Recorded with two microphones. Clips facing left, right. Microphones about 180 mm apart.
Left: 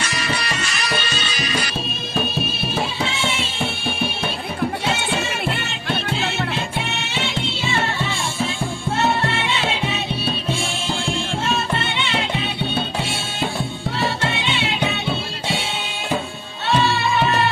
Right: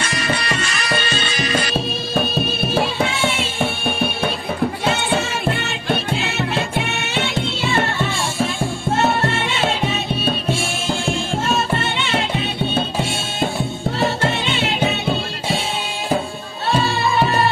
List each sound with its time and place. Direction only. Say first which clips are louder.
0.0 s music: right 3 dB; 50° right (ahead or behind)
3.6 s music: right 4 dB; 55° right (ahead or behind)
11.4 s music: right 3 dB; 45° right (ahead or behind)
14.2 s music: right 3 dB; 45° right (ahead or behind)